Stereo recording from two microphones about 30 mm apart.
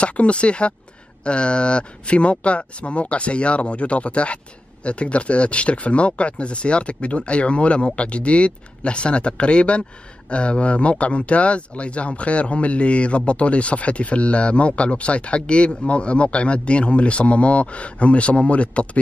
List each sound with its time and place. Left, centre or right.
0.0 s speech: left